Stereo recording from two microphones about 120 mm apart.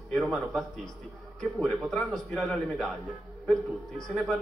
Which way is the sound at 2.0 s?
Centre (ahead or behind).